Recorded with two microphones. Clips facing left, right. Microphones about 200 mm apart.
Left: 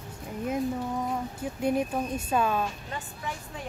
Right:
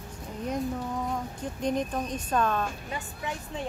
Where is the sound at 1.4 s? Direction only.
10° left (ahead or behind).